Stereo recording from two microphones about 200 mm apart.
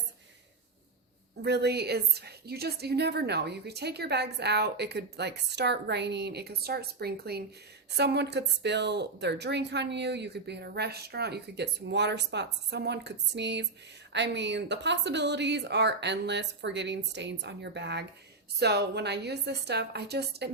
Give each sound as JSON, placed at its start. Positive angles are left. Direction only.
{"t": 1.4, "sound": "a woman's voice", "side_deg": -55}